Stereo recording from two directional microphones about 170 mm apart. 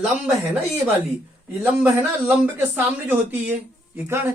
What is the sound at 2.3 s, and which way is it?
Speech, 10° right (ahead or behind).